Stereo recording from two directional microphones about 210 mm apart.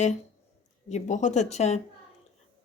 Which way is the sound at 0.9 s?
35° left (ahead or behind).